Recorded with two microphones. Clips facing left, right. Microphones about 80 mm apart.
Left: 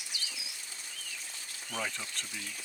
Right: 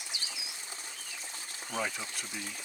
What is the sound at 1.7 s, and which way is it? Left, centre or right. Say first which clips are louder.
Speech: right 2 dB; centre.